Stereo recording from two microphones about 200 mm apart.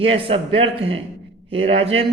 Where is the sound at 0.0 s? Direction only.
25° right (ahead or behind).